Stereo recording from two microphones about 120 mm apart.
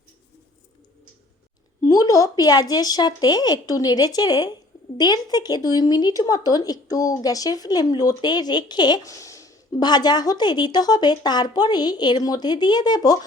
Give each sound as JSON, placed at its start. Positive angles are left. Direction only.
{"t": 1.8, "sound": "speech", "side_deg": 30}